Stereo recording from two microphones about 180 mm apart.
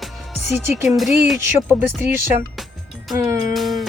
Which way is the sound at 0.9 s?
Centre (ahead or behind).